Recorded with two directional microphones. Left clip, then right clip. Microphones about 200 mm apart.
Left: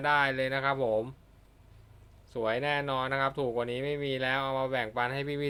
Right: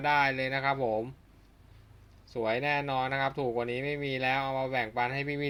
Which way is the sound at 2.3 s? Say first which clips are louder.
Even; 5° left (ahead or behind).